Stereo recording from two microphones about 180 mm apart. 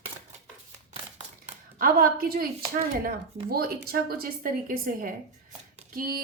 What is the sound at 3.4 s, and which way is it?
A woman's voice, 60° right (ahead or behind).